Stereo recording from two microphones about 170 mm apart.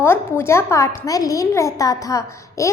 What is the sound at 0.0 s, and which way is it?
A woman's voice, 15° left (ahead or behind).